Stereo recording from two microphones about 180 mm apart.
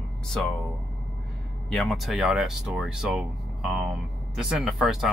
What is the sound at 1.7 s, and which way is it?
Speech, centre (ahead or behind).